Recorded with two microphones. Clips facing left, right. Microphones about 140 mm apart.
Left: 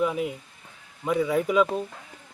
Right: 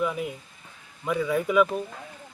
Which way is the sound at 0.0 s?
20° left (ahead or behind).